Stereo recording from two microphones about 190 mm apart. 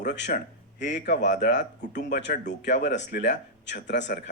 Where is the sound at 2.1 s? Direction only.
65° left (ahead or behind).